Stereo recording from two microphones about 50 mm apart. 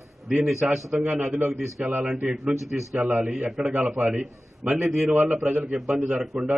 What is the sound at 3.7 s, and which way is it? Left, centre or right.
Speech, right.